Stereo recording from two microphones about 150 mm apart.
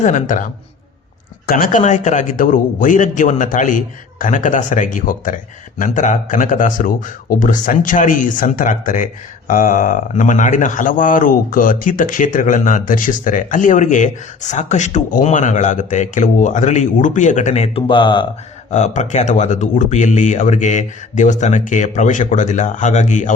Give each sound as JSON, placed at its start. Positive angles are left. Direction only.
{"t": 0.0, "sound": "speech", "side_deg": 55}
{"t": 1.5, "sound": "speech", "side_deg": 70}
{"t": 18.7, "sound": "speech", "side_deg": 55}